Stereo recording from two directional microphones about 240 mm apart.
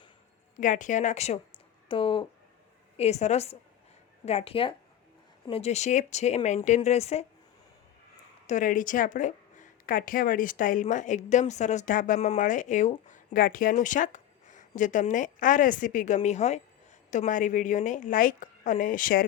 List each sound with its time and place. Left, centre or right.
0.5 s speech: left
8.4 s speech: left